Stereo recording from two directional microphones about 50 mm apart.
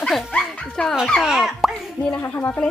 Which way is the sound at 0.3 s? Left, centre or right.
Centre.